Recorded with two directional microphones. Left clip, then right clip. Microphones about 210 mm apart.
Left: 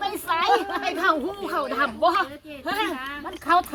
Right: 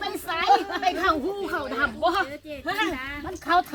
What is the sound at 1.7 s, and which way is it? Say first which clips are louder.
Speech: left 2 dB; 30° left (ahead or behind).